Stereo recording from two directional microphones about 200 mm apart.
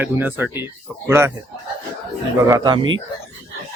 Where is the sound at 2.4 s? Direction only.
20° right (ahead or behind).